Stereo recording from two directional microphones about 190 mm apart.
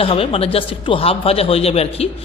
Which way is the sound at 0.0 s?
30° left (ahead or behind).